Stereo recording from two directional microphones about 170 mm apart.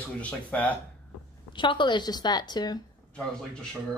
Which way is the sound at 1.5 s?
30° left (ahead or behind).